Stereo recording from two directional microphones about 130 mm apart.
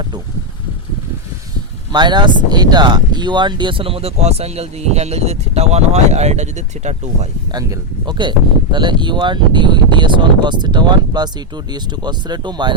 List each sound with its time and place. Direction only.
1.9 s speech: 35° right (ahead or behind); by 7.3 s 60° right (ahead or behind)
7.5 s speech: 35° right (ahead or behind)